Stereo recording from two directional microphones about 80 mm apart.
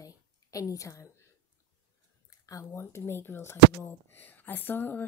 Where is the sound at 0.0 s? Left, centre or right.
Left.